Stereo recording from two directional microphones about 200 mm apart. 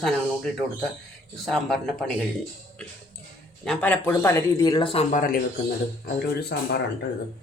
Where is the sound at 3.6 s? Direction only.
5° left (ahead or behind); by 5.3 s 40° left (ahead or behind).